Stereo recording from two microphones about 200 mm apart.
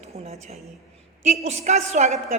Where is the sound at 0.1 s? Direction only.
30° right (ahead or behind).